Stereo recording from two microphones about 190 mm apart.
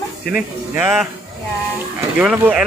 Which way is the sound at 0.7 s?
10° right (ahead or behind).